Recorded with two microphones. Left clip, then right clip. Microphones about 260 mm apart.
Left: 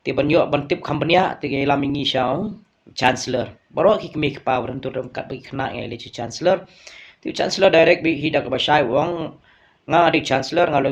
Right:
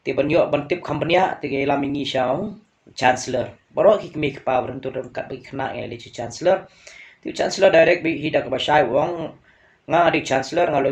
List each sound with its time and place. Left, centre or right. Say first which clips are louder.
0.0 s speech: left 1 dB; left